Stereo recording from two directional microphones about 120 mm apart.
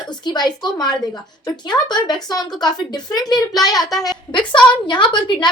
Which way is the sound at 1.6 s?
35° left (ahead or behind).